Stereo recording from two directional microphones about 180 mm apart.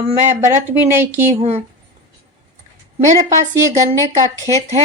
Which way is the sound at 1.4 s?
35° right (ahead or behind).